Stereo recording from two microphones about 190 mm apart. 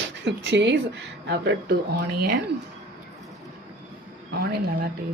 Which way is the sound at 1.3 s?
60° right (ahead or behind).